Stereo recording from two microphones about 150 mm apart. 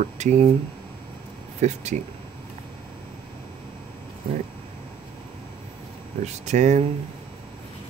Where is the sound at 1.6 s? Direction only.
50° right (ahead or behind).